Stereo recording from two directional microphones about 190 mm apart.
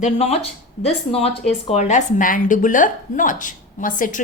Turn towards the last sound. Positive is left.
turn(degrees=45)  # may be behind; listen again after turning